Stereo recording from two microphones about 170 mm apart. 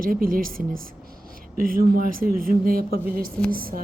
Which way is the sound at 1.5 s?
55° right (ahead or behind).